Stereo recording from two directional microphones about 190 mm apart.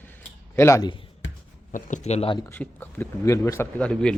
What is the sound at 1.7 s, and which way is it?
Speech, 40° left (ahead or behind).